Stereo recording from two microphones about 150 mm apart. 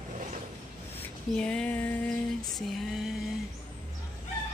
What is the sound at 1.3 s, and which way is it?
Music, 5° left (ahead or behind).